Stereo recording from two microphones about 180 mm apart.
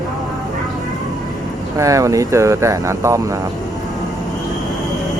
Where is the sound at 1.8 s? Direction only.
15° right (ahead or behind).